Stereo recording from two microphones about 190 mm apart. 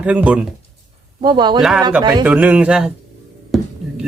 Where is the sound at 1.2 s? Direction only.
25° right (ahead or behind).